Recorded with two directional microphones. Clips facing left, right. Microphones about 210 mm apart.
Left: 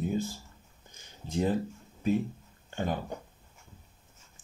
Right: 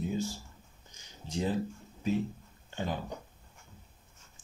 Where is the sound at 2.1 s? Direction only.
55° left (ahead or behind).